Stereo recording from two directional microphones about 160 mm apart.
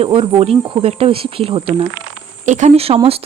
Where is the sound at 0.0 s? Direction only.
35° right (ahead or behind).